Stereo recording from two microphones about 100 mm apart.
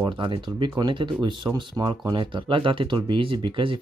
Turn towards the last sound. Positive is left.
turn(degrees=-60)  # may be behind; listen again after turning